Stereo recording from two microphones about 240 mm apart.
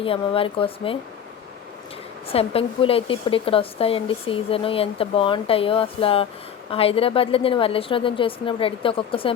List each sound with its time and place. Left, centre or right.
0.0 s speech: left
2.3 s speech: left